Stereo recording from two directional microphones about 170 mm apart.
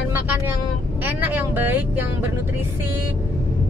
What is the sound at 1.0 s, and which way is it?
A woman's voice, 10° right (ahead or behind).